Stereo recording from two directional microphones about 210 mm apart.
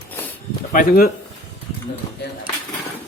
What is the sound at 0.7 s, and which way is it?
Speech, 40° left (ahead or behind).